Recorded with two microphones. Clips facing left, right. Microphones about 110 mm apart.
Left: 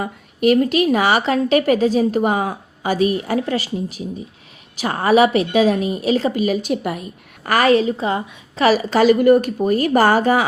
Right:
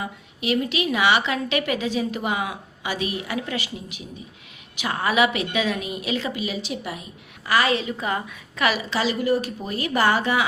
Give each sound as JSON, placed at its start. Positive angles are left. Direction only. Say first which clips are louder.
{"t": 0.0, "sound": "a woman's voice", "louder": "left 12 dB", "side_deg": 50}